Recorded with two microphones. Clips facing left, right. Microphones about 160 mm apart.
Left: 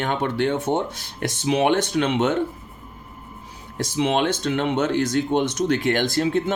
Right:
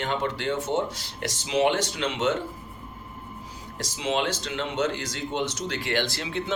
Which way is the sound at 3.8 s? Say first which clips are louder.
Left 6 dB; 60° left (ahead or behind).